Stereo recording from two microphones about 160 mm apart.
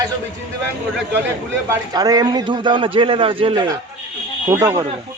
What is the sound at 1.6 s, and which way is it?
A man's voice, 25° right (ahead or behind).